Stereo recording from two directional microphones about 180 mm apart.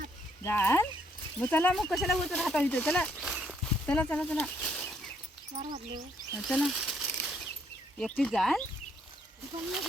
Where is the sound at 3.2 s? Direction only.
5° right (ahead or behind).